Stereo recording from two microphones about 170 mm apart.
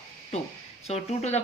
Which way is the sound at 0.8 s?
40° left (ahead or behind).